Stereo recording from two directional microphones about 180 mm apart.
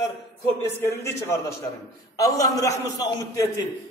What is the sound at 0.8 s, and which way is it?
A man's voice, 15° left (ahead or behind).